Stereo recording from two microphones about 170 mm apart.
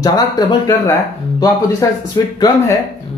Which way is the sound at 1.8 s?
20° left (ahead or behind).